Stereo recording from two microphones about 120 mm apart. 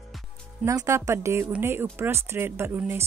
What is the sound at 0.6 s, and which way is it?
A woman's voice, 25° right (ahead or behind).